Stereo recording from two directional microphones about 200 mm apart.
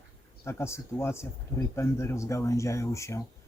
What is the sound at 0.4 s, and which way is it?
Speech, 15° left (ahead or behind).